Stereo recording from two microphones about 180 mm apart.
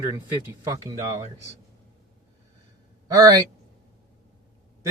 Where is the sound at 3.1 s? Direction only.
20° right (ahead or behind).